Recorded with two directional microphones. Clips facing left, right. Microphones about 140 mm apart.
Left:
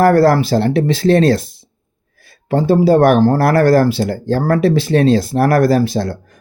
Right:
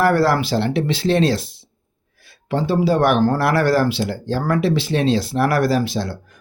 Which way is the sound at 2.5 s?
45° left (ahead or behind).